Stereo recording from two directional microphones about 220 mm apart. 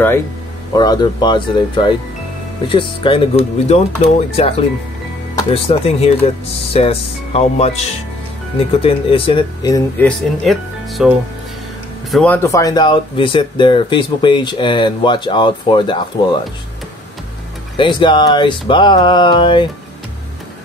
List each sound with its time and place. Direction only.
0.7 s speech: 20° left (ahead or behind)
10.0 s speech: centre (ahead or behind)
12.4 s speech: 15° left (ahead or behind)
17.7 s speech: 20° left (ahead or behind)